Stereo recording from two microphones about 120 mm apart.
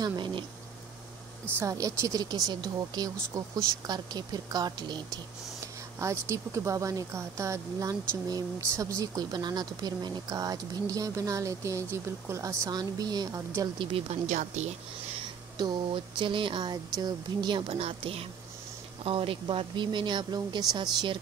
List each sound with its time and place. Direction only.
0.0 s speech: 40° right (ahead or behind)
1.6 s speech: 30° right (ahead or behind)
5.9 s speech: 25° right (ahead or behind)
13.7 s speech: 60° right (ahead or behind); by 14.8 s 75° right (ahead or behind)
15.5 s speech: 40° right (ahead or behind)